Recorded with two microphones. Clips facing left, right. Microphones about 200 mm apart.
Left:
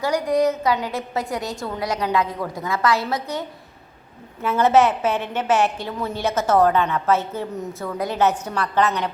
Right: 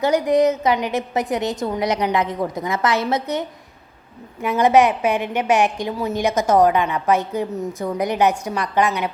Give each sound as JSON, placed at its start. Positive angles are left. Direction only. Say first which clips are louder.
{"t": 0.0, "sound": "a woman's voice", "louder": "right 3 dB", "side_deg": -20}